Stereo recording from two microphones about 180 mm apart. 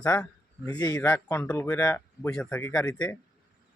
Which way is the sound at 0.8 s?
20° left (ahead or behind).